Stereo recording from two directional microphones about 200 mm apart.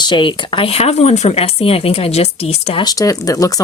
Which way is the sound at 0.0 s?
25° left (ahead or behind).